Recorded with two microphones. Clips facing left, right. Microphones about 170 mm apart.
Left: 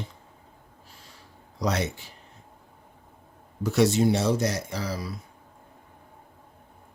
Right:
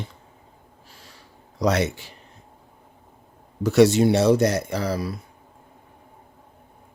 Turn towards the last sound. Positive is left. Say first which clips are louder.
# right 6 dB
turn(degrees=-60)  # may be behind; listen again after turning